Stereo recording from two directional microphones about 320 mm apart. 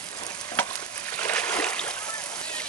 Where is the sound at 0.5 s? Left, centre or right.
Centre.